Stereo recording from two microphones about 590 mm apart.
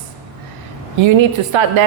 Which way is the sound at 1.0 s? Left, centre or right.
Right.